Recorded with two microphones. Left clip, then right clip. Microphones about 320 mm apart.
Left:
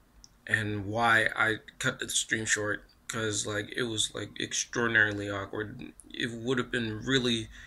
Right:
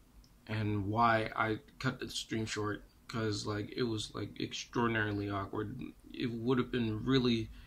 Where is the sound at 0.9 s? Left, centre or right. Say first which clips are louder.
Left 5 dB; centre.